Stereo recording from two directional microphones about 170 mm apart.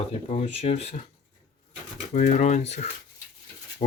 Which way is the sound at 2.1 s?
50° left (ahead or behind).